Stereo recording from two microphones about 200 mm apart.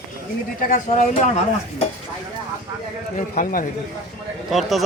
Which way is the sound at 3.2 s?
40° left (ahead or behind).